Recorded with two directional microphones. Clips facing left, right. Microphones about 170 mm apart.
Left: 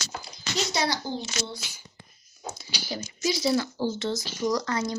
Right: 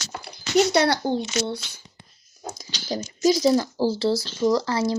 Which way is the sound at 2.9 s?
45° right (ahead or behind).